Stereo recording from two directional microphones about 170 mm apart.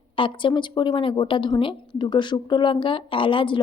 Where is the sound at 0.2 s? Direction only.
30° left (ahead or behind).